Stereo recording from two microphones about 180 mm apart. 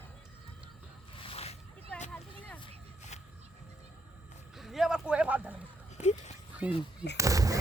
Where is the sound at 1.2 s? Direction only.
35° left (ahead or behind).